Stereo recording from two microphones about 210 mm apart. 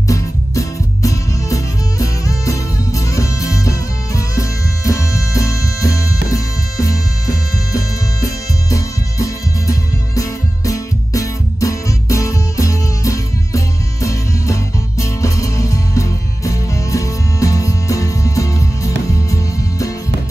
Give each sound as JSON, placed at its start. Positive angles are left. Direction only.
{"t": 0.1, "sound": "music", "side_deg": 15}